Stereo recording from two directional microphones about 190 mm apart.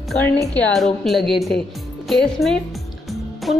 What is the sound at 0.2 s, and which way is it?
Speech, 10° left (ahead or behind).